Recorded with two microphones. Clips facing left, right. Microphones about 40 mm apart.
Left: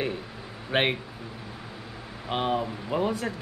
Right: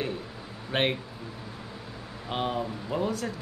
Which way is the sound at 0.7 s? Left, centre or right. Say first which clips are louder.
Left 2 dB; centre.